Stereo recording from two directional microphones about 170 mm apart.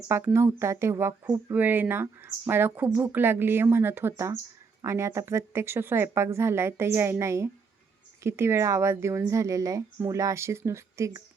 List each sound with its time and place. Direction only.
0.1 s speech: 15° right (ahead or behind)